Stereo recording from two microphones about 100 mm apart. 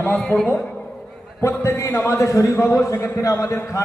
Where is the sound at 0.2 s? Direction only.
5° left (ahead or behind).